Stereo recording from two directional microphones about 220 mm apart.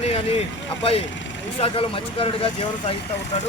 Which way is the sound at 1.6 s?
25° left (ahead or behind).